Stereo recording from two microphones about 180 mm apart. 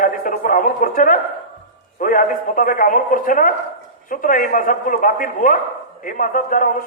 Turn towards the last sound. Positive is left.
turn(degrees=50)  # may be behind; listen again after turning